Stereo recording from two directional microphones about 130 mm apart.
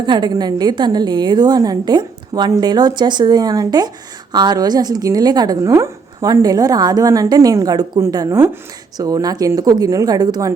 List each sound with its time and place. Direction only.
0.0 s a woman's voice: 35° right (ahead or behind)